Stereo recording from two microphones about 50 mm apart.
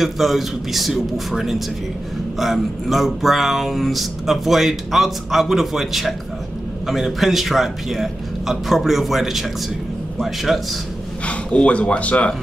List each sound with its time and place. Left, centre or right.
0.0 s speech: centre
11.2 s speech: left